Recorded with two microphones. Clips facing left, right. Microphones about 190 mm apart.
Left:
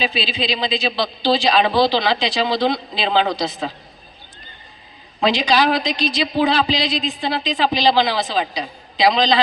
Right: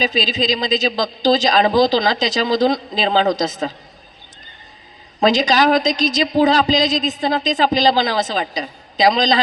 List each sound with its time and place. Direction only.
0.0 s a man's voice: 40° right (ahead or behind)
5.2 s a woman's voice: 40° right (ahead or behind)